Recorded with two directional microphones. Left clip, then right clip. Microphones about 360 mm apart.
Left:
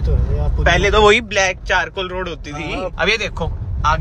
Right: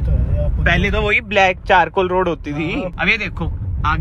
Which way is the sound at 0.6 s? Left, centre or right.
Centre.